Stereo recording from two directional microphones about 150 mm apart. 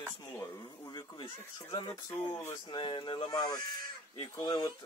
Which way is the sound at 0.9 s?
35° left (ahead or behind).